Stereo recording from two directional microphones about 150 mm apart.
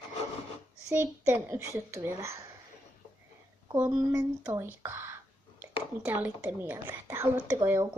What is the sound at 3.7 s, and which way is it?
A woman's voice, 25° right (ahead or behind).